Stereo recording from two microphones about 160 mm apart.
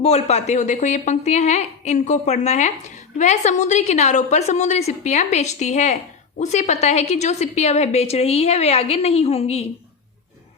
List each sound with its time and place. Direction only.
0.0 s a woman's voice: 45° left (ahead or behind)